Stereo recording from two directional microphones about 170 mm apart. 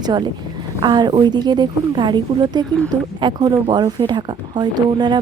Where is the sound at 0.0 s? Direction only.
25° right (ahead or behind).